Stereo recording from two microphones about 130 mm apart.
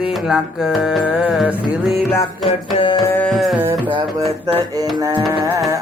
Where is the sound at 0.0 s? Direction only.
5° right (ahead or behind).